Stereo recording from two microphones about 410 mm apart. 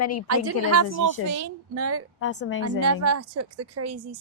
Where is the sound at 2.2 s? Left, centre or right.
Left.